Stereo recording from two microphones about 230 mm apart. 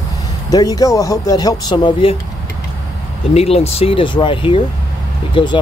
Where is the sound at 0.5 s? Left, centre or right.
Centre.